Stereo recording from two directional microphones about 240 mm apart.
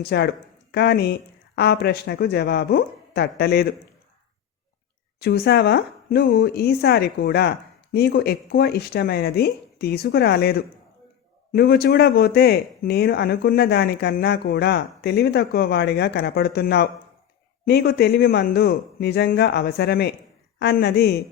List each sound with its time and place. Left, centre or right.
0.0 s speech: left
5.2 s speech: left